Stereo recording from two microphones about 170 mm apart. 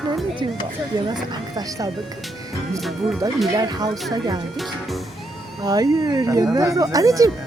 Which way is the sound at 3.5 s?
20° right (ahead or behind).